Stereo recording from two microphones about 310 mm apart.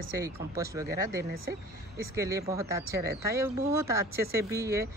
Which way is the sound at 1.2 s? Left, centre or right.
Right.